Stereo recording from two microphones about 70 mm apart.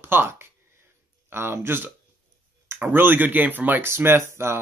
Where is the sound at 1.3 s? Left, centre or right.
Right.